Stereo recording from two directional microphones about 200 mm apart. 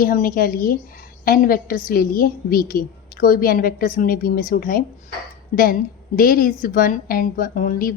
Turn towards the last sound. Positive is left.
turn(degrees=45)  # may be behind; listen again after turning